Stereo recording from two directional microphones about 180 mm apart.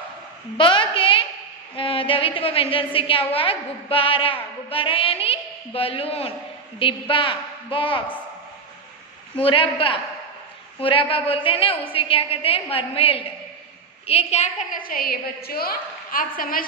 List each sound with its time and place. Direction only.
0.6 s a sound: 30° left (ahead or behind)
1.8 s a woman's voice: 30° left (ahead or behind)
9.4 s a woman's voice: 30° left (ahead or behind)
14.9 s a woman's voice: 55° left (ahead or behind)